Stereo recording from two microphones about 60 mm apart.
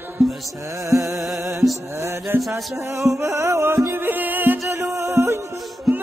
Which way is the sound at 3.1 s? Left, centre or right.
Right.